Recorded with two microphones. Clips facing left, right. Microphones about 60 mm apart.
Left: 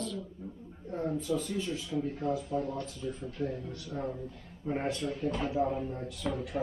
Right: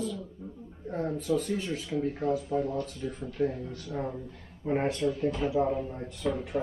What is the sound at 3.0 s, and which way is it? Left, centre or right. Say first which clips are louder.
Speech: right 2 dB; right.